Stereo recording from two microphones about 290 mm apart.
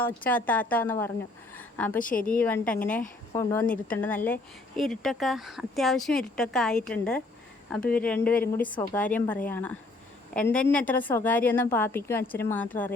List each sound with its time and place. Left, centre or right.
0.0 s speech: centre
1.5 s a sound: centre
2.0 s a woman's voice: left
2.4 s speech: centre
8.6 s a woman's voice: centre
9.0 s a woman's voice: centre